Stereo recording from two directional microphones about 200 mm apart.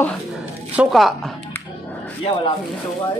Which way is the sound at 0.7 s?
Centre (ahead or behind).